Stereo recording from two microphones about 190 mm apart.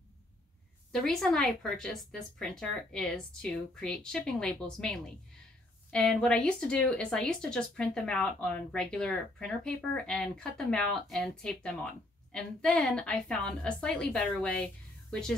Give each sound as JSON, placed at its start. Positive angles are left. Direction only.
{"t": 1.0, "sound": "speech", "side_deg": 0}